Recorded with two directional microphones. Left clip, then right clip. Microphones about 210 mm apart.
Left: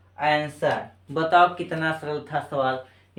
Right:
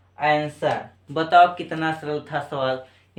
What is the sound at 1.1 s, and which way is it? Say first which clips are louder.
Speech: right 3 dB; 30° right (ahead or behind).